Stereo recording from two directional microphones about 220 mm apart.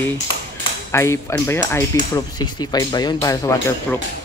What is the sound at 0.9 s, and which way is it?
Speech, 15° left (ahead or behind).